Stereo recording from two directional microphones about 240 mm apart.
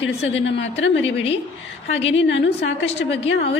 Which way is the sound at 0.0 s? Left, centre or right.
Left.